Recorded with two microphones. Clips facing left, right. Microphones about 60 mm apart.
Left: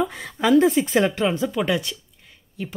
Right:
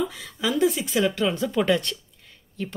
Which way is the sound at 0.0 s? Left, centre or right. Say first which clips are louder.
Left 4 dB; left.